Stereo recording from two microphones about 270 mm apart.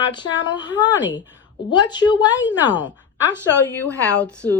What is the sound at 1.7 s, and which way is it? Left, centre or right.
Speech, centre.